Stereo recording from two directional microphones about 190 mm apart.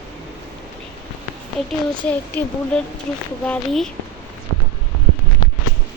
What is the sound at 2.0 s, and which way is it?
Speech, 10° left (ahead or behind).